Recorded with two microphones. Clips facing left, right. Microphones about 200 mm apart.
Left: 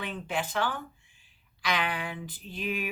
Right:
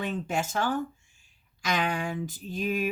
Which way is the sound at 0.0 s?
45° right (ahead or behind).